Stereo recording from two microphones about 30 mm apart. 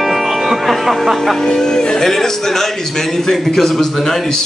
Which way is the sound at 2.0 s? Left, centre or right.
Centre.